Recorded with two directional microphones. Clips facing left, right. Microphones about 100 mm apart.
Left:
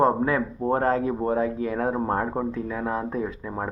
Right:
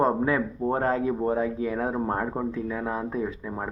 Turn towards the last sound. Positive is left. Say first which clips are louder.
# left 1 dB
turn(degrees=30)  # may be behind; listen again after turning